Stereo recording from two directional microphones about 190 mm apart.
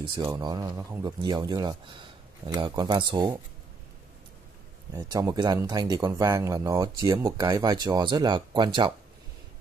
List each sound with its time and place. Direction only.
0.1 s speech: 20° right (ahead or behind)
4.9 s speech: 20° right (ahead or behind)